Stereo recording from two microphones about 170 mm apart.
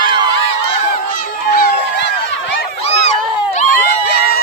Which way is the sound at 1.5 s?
60° left (ahead or behind).